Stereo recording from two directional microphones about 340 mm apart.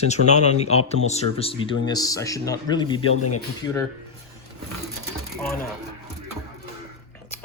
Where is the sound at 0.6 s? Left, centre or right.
Centre.